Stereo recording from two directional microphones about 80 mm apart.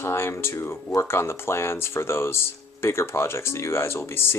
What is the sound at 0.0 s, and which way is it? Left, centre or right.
Speech, left.